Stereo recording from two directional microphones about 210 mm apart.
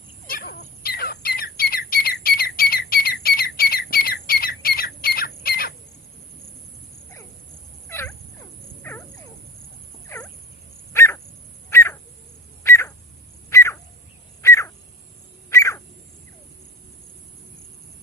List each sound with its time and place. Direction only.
0.3 s bird: 45° left (ahead or behind)
7.9 s wild animals: 10° left (ahead or behind)
10.9 s dog: 15° left (ahead or behind)
11.7 s a sound: 15° left (ahead or behind)